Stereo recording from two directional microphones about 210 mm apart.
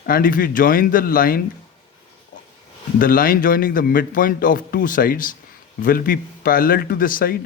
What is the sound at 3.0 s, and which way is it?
A man's voice, 45° left (ahead or behind).